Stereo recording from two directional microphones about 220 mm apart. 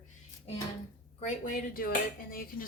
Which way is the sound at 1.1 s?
35° left (ahead or behind).